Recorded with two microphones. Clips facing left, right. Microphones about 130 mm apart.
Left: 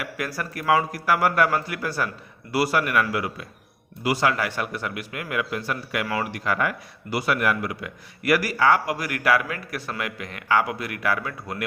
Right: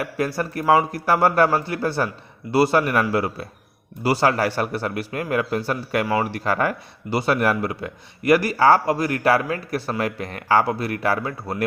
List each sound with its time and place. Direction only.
0.0 s a man's voice: 30° right (ahead or behind)